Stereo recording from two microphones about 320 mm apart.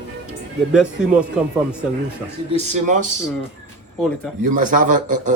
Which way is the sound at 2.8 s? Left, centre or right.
Right.